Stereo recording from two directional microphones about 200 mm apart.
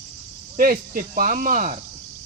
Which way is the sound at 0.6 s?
45° right (ahead or behind).